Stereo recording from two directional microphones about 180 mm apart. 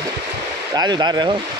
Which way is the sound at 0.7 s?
20° right (ahead or behind).